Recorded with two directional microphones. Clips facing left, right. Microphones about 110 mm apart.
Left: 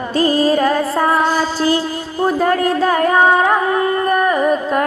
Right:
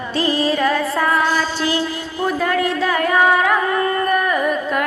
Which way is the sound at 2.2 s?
35° left (ahead or behind).